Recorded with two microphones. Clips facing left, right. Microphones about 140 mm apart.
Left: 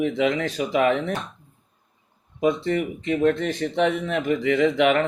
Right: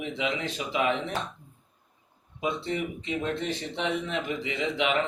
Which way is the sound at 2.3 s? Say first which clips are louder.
Left 8 dB; 50° left (ahead or behind).